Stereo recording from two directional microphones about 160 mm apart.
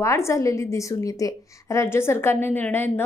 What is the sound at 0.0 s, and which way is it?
A woman's voice, 20° left (ahead or behind).